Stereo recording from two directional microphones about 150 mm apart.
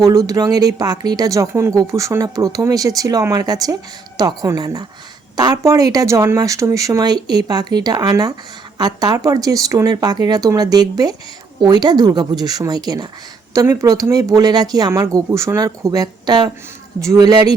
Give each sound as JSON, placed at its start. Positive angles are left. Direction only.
{"t": 0.0, "sound": "speech", "side_deg": -25}